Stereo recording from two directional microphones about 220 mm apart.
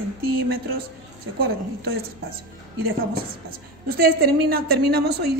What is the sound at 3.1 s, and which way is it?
A woman's voice, 45° right (ahead or behind).